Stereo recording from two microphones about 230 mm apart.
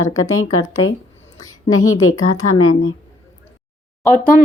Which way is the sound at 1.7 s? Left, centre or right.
Left.